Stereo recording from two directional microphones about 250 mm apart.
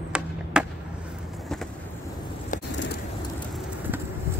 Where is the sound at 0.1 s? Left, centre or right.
Centre.